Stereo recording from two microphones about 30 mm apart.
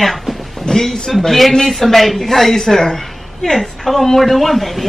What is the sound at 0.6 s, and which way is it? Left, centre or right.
Speech, centre.